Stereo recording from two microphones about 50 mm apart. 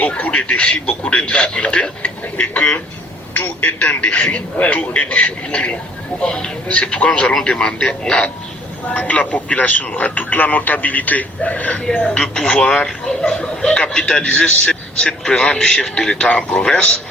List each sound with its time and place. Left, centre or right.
0.0 s speech: left
3.8 s a man's voice: left
8.9 s speech: left
11.9 s speech: centre